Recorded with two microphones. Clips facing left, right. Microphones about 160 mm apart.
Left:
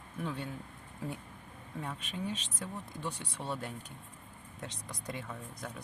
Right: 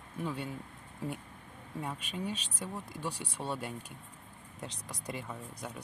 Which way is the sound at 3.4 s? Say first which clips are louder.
Right 1 dB; 30° right (ahead or behind).